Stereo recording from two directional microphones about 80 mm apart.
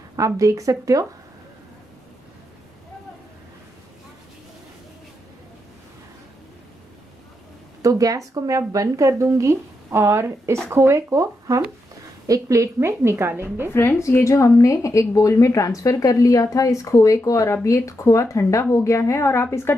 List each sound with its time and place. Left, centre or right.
0.1 s a woman's voice: right
7.8 s speech: right
13.7 s a woman's voice: left